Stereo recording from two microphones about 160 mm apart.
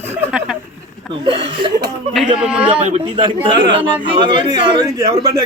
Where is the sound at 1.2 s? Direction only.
30° right (ahead or behind).